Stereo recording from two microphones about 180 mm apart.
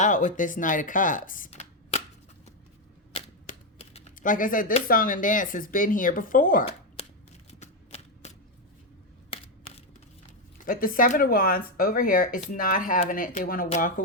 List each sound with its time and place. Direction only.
0.0 s speech: 45° left (ahead or behind)
1.5 s a sound: 35° left (ahead or behind)
3.2 s typewriter: 35° left (ahead or behind); by 4.6 s 50° left (ahead or behind)
4.9 s speech: 50° left (ahead or behind)
7.0 s shuffling cards: 35° left (ahead or behind)
7.6 s a sound: 35° left (ahead or behind)
9.3 s a sound: 35° left (ahead or behind)
10.7 s speech: 50° left (ahead or behind)
13.7 s speech: 45° left (ahead or behind)